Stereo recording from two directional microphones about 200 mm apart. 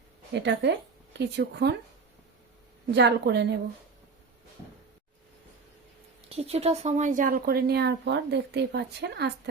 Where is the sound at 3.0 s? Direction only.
60° right (ahead or behind).